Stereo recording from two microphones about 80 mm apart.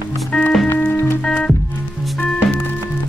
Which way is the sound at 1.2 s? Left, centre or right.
Centre.